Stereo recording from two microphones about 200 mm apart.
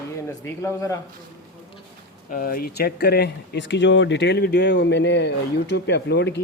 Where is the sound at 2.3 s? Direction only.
45° left (ahead or behind).